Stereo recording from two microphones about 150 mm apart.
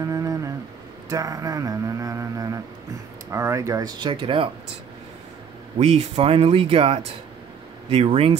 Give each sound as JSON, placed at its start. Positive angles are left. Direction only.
{"t": 0.0, "sound": "a sound", "side_deg": -25}
{"t": 3.3, "sound": "speech", "side_deg": -20}
{"t": 5.8, "sound": "speech", "side_deg": -45}